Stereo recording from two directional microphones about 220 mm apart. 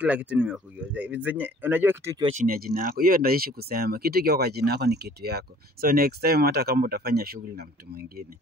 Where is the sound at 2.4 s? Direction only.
40° right (ahead or behind).